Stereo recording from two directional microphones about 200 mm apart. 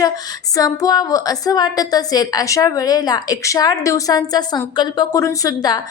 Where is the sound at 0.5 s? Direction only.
20° left (ahead or behind).